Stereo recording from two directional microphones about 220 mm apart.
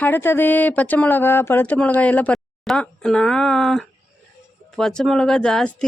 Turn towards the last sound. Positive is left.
turn(degrees=5)  # may be behind; listen again after turning